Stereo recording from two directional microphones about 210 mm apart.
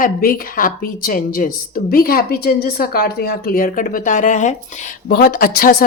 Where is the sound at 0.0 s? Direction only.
45° left (ahead or behind).